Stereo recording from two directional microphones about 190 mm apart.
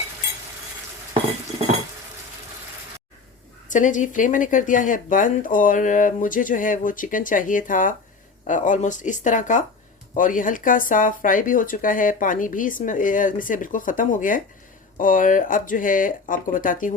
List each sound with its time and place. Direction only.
3.7 s speech: 40° left (ahead or behind)